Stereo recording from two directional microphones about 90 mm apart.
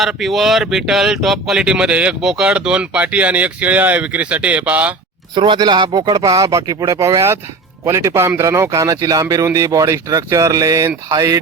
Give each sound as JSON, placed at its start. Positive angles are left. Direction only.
{"t": 0.0, "sound": "speech", "side_deg": 0}
{"t": 5.3, "sound": "speech", "side_deg": -60}